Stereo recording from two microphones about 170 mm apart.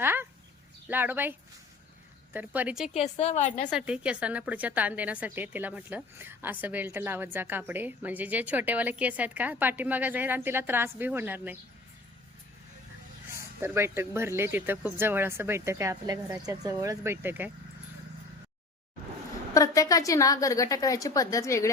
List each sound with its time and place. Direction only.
0.0 s a sound: 10° right (ahead or behind)
0.9 s speech: 10° right (ahead or behind)
2.9 s a woman's voice: 40° left (ahead or behind)
3.7 s speech: 5° right (ahead or behind)
13.3 s speech: 15° right (ahead or behind)
19.5 s a woman's voice: 20° left (ahead or behind)